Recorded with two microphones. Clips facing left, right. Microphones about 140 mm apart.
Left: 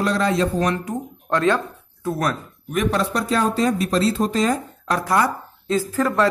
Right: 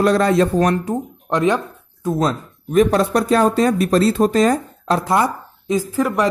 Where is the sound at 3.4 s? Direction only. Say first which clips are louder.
Right 4 dB; 55° right (ahead or behind).